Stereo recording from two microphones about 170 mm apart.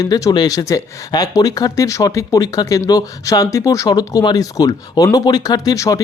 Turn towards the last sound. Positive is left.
turn(degrees=20)  # may be behind; listen again after turning